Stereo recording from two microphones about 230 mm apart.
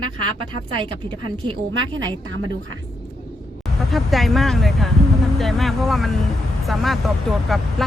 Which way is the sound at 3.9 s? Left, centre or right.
Centre.